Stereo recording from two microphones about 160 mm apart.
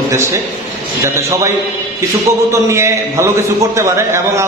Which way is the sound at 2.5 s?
15° right (ahead or behind).